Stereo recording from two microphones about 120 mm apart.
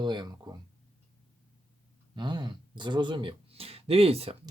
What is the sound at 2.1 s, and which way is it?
Speech, 40° right (ahead or behind).